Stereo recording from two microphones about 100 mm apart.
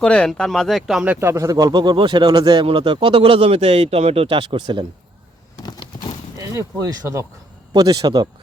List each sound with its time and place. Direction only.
0.0 s speech: 10° left (ahead or behind)
1.0 s speech: 15° right (ahead or behind)
1.3 s a man's voice: 30° right (ahead or behind)
2.6 s speech: 55° right (ahead or behind)
5.6 s a sound: 45° left (ahead or behind)
6.3 s a man's voice: 35° right (ahead or behind)